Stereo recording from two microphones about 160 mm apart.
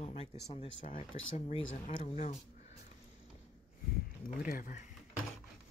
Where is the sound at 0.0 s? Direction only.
40° left (ahead or behind).